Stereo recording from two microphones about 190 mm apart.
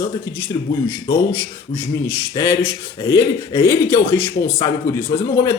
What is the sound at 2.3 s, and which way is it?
Speech, 20° left (ahead or behind).